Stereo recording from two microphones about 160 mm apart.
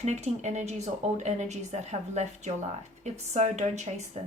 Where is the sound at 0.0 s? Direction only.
45° right (ahead or behind).